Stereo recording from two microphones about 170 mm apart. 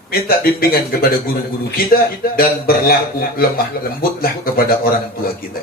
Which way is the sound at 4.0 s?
60° left (ahead or behind).